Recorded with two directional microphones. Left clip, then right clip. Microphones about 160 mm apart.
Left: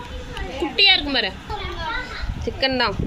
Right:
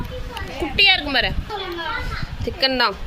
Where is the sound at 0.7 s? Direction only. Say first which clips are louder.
Right 1 dB; centre (ahead or behind).